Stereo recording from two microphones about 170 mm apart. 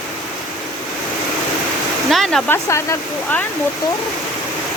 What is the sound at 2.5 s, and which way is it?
Speech, 15° left (ahead or behind).